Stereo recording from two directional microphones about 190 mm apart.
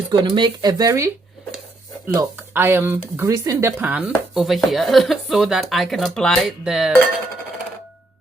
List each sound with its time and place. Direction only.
0.1 s speech: 25° right (ahead or behind)
2.1 s speech: 10° right (ahead or behind)